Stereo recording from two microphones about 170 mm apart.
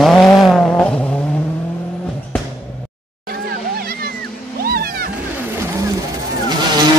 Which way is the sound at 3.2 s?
65° right (ahead or behind).